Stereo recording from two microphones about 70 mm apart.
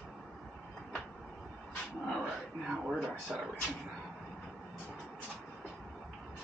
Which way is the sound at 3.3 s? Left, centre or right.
Centre.